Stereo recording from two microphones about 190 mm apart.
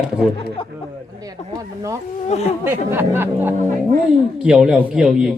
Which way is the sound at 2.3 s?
35° left (ahead or behind).